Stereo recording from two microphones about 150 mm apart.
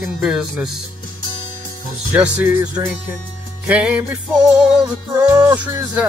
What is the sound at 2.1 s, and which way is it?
Music, 5° right (ahead or behind).